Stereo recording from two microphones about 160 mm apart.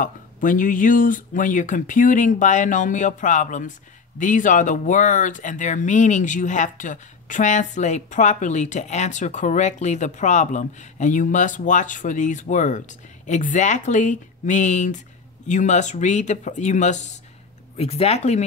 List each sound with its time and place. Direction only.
0.0 s speech: 55° left (ahead or behind); by 18.4 s 40° left (ahead or behind)